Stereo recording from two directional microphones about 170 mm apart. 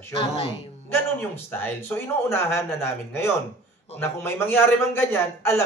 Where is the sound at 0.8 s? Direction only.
15° left (ahead or behind).